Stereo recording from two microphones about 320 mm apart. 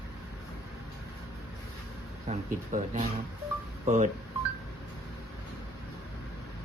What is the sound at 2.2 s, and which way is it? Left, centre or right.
Speech, right.